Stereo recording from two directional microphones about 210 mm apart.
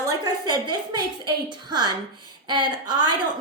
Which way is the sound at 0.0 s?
15° right (ahead or behind).